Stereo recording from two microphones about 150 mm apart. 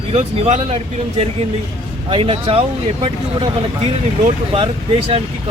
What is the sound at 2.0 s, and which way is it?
A man's voice, 35° right (ahead or behind).